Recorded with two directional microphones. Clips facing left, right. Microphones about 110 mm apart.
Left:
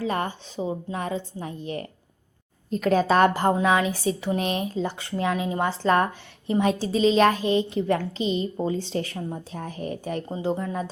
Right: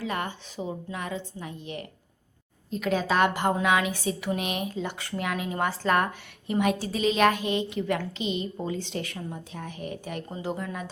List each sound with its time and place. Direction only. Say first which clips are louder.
0.0 s a woman's voice: left 4 dB; 35° left (ahead or behind)